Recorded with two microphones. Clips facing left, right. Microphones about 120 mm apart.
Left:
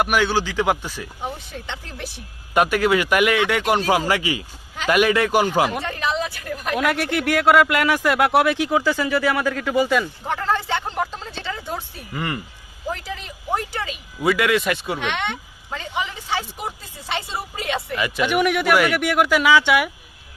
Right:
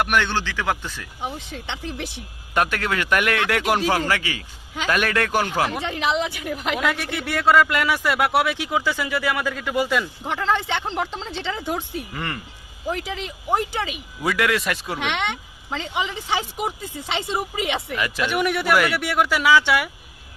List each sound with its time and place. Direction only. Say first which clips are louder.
0.0 s speech: left 2 dB; 10° left (ahead or behind)
1.6 s speech: right 3 dB; 20° right (ahead or behind)
2.6 s speech: left 5 dB; 10° left (ahead or behind)
3.8 s speech: left 2 dB; 15° left (ahead or behind)
5.8 s speech: right 1 dB; 15° right (ahead or behind)
6.9 s speech: left 6 dB; 5° left (ahead or behind)
7.9 s speech: left 3 dB; centre (ahead or behind)
10.2 s speech: even; 20° right (ahead or behind)
12.1 s speech: left 7 dB; 10° left (ahead or behind)
12.9 s speech: right 2 dB; 15° right (ahead or behind)
14.2 s speech: left 3 dB; centre (ahead or behind)
14.9 s speech: even; 15° right (ahead or behind)
17.9 s speech: left 5 dB; 10° left (ahead or behind)